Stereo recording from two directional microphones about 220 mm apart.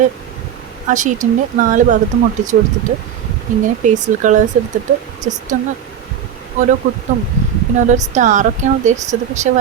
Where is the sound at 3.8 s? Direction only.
35° right (ahead or behind).